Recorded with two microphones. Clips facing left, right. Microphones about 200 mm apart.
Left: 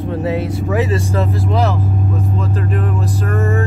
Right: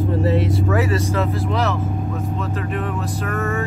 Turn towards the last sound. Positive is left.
turn(degrees=35)  # may be behind; listen again after turning